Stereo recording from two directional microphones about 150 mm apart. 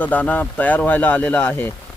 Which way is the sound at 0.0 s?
10° left (ahead or behind).